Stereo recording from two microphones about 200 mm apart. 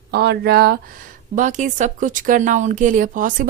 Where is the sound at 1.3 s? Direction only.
40° right (ahead or behind).